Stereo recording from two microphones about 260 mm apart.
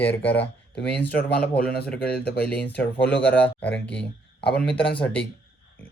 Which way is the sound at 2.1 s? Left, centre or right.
Left.